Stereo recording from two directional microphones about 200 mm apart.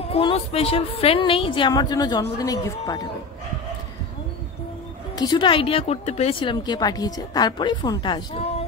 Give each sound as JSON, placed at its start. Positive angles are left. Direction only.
{"t": 0.1, "sound": "speech", "side_deg": 30}
{"t": 5.1, "sound": "speech", "side_deg": 20}
{"t": 8.3, "sound": "a sound", "side_deg": 30}